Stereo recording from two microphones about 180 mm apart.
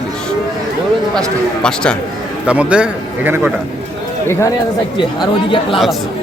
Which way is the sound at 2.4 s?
5° right (ahead or behind).